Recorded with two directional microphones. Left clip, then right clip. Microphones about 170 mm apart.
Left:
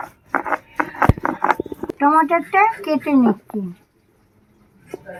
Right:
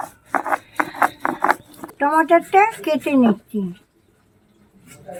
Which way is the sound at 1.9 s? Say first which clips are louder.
Even; 40° right (ahead or behind).